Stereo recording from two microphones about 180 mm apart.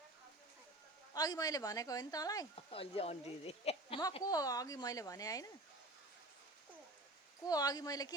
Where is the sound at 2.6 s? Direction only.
30° left (ahead or behind).